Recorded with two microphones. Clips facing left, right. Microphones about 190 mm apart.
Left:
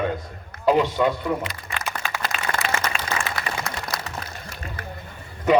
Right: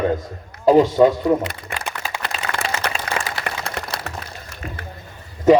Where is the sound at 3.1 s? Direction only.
65° right (ahead or behind).